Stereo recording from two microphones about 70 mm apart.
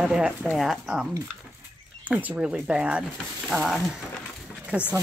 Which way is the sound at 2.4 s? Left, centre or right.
Centre.